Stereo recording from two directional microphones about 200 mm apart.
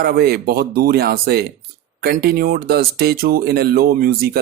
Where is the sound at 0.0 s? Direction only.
50° right (ahead or behind).